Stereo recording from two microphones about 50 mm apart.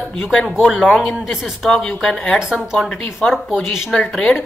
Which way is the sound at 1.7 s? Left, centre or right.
Centre.